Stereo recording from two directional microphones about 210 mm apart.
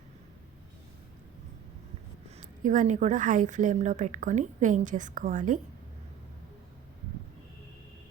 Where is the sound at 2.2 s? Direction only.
35° right (ahead or behind).